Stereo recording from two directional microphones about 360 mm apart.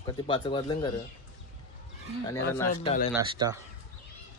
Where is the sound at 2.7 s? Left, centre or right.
Centre.